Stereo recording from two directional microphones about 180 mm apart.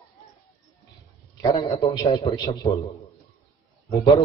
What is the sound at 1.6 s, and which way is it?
A man's voice, 25° left (ahead or behind).